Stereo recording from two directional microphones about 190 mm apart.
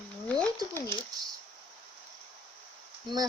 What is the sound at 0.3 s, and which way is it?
Pigeon, 5° left (ahead or behind).